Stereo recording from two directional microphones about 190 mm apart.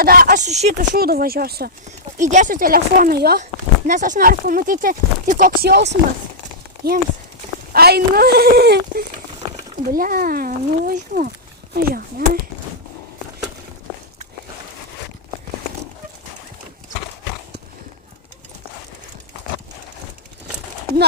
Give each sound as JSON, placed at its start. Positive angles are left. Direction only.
{"t": 0.0, "sound": "speech", "side_deg": -50}
{"t": 0.9, "sound": "speech", "side_deg": -55}
{"t": 2.1, "sound": "speech", "side_deg": -40}
{"t": 3.8, "sound": "speech", "side_deg": -40}
{"t": 7.7, "sound": "speech", "side_deg": -55}